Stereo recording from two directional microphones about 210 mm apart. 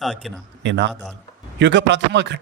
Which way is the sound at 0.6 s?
60° right (ahead or behind).